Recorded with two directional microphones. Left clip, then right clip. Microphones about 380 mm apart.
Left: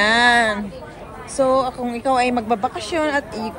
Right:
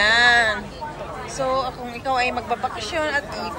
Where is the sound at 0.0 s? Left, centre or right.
Centre.